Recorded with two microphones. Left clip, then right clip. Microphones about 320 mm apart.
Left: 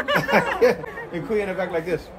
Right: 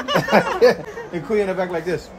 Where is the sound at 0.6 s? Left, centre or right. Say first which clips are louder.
Right 4 dB; right.